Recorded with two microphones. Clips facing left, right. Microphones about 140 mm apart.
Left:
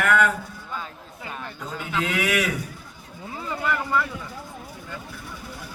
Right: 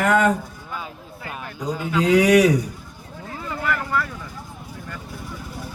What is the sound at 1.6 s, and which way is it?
Mantra, 10° right (ahead or behind).